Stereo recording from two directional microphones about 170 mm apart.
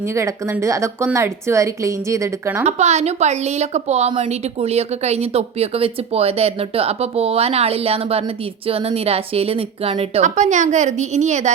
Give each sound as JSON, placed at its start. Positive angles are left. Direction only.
{"t": 0.1, "sound": "speech", "side_deg": -15}
{"t": 2.6, "sound": "a woman's voice", "side_deg": -40}